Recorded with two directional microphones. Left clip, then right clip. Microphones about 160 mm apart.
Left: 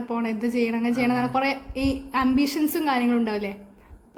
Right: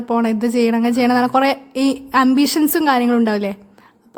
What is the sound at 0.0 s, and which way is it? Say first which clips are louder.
A woman's voice: right 9 dB; 55° right (ahead or behind).